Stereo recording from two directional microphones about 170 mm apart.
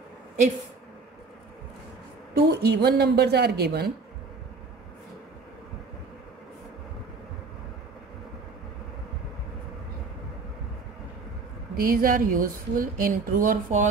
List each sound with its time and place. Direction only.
2.3 s speech: 65° right (ahead or behind)
11.7 s speech: 55° right (ahead or behind)